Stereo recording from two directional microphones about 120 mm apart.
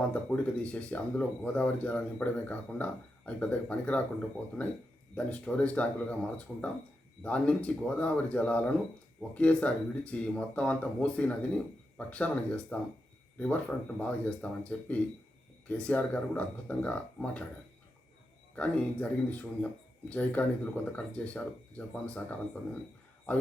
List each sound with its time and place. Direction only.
0.1 s speech: 10° left (ahead or behind)
18.5 s speech: 10° left (ahead or behind)